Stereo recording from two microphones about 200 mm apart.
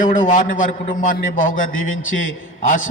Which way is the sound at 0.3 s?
40° left (ahead or behind).